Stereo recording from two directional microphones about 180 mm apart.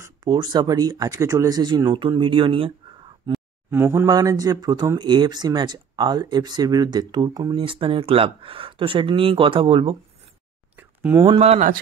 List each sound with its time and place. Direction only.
0.0 s speech: 25° right (ahead or behind)
3.7 s speech: 15° right (ahead or behind); by 9.9 s 30° right (ahead or behind)
10.8 s a sound: 10° right (ahead or behind)
11.2 s speech: 35° right (ahead or behind)